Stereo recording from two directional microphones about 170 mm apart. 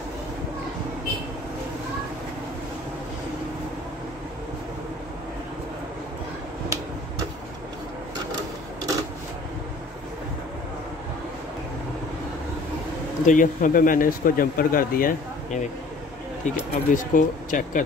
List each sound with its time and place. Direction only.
13.2 s speech: 50° left (ahead or behind)